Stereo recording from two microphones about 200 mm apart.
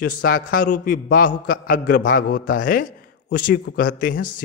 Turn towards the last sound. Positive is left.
turn(degrees=45)  # may be behind; listen again after turning